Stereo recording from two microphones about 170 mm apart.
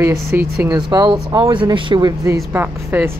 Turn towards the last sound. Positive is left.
turn(degrees=-10)  # may be behind; listen again after turning